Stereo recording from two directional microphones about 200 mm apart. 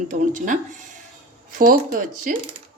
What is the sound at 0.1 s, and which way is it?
Speech, 40° right (ahead or behind).